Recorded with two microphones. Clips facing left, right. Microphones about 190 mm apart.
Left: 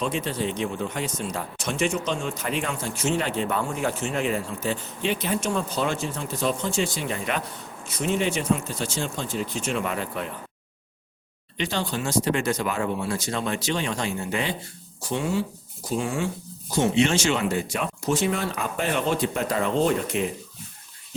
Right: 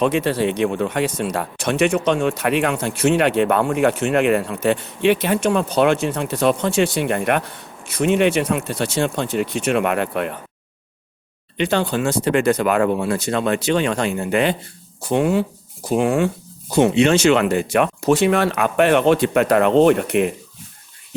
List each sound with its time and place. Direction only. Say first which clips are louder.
0.0 s speech: right 9 dB; 70° right (ahead or behind)
11.5 s speech: right 8 dB; 60° right (ahead or behind)